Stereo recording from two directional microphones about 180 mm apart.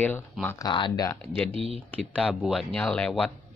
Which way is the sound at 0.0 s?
10° left (ahead or behind).